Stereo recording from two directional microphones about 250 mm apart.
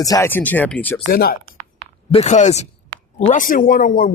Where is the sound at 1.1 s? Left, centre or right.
Left.